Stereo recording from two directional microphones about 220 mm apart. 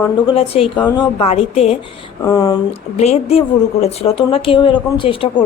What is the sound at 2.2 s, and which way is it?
Speech, 15° left (ahead or behind).